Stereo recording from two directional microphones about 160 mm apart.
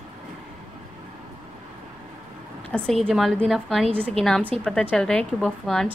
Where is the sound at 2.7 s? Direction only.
5° left (ahead or behind).